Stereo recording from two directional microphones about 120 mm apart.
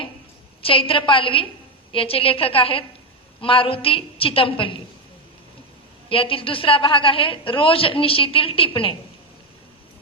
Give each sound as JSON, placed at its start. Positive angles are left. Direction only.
{"t": 0.6, "sound": "a woman's voice", "side_deg": 50}
{"t": 6.1, "sound": "a woman's voice", "side_deg": 50}